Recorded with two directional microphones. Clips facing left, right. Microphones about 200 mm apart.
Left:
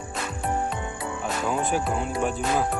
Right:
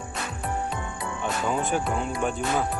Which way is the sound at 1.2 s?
Centre (ahead or behind).